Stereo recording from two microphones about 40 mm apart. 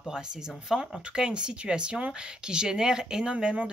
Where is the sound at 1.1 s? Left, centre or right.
Right.